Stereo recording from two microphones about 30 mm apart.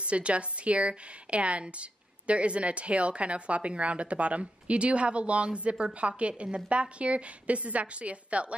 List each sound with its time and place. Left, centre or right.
0.0 s a woman's voice: right